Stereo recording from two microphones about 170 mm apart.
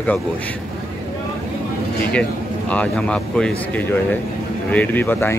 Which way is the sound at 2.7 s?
5° left (ahead or behind).